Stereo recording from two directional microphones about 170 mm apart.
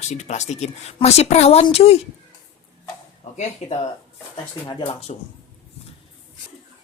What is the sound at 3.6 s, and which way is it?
Speech, 40° left (ahead or behind).